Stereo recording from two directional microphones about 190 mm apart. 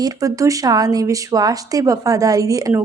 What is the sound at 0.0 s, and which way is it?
A woman's voice, 15° right (ahead or behind).